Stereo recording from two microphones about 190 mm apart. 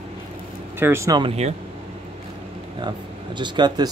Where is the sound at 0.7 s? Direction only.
15° right (ahead or behind).